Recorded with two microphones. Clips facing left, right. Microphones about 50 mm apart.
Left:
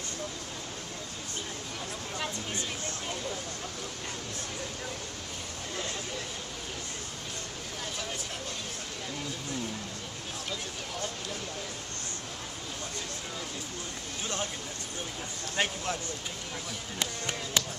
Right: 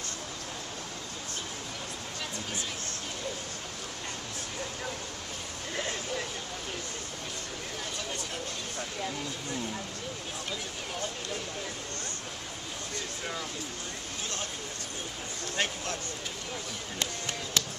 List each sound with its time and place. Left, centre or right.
15.5 s speech: centre
17.0 s speech: centre